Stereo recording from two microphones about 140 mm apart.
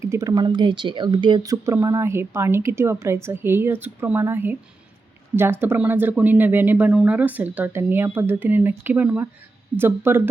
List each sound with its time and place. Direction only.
0.0 s speech: 20° right (ahead or behind)